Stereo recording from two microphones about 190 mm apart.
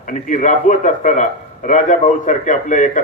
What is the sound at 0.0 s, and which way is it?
A man's voice, 40° left (ahead or behind).